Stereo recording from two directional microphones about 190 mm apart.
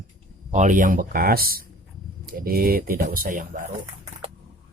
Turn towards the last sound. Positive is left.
turn(degrees=-45)  # may be behind; listen again after turning